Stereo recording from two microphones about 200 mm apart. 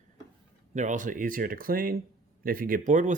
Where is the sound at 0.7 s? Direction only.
40° right (ahead or behind).